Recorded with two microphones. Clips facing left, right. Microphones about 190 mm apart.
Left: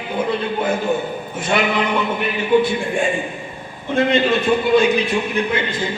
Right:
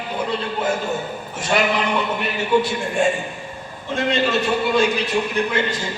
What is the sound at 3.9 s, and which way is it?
Speech, 55° left (ahead or behind).